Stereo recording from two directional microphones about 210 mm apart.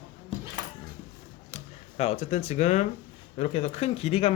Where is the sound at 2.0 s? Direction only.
30° left (ahead or behind).